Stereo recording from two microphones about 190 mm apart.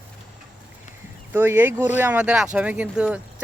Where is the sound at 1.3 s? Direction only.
10° right (ahead or behind).